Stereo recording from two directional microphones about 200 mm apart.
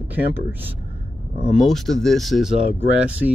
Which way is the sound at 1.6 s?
Centre (ahead or behind).